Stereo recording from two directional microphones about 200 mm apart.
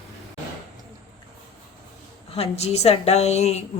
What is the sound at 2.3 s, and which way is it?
Speech, 30° left (ahead or behind).